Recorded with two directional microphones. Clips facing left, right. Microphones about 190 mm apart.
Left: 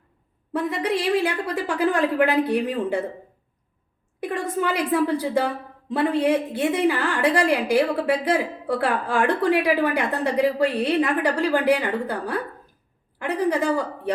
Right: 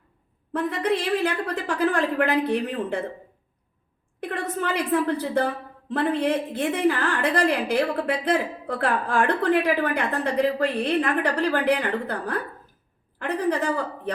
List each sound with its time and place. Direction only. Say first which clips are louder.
0.5 s a woman's voice: even; 10° left (ahead or behind)
4.2 s a woman's voice: left 3 dB; 10° left (ahead or behind)